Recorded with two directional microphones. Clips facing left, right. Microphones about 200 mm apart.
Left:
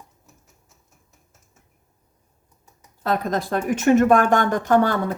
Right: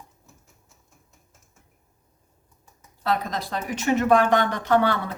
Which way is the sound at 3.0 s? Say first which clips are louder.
Left 4 dB; 50° left (ahead or behind).